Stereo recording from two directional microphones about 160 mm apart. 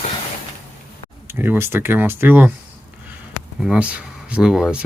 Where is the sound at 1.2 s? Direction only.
15° right (ahead or behind).